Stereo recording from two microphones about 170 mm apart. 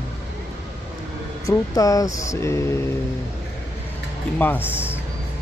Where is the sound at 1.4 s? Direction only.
20° left (ahead or behind).